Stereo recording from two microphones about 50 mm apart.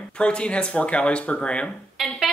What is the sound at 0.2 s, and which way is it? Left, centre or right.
Speech, left.